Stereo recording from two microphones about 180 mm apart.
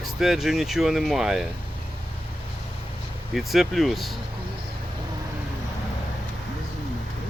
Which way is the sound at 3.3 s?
Centre (ahead or behind).